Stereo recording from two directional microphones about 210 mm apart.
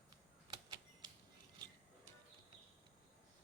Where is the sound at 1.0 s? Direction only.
20° right (ahead or behind).